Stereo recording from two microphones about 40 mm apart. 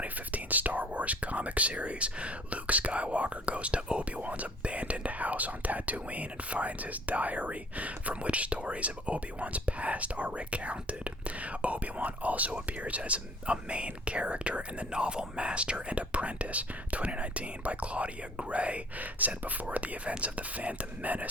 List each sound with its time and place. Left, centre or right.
0.0 s whispering: right
4.2 s speech: right